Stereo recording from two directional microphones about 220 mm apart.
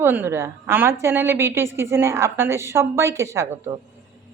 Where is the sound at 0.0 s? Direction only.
10° right (ahead or behind).